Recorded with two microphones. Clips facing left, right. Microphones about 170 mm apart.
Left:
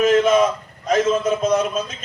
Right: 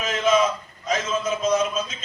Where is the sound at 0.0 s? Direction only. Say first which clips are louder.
Left 6 dB; 55° left (ahead or behind).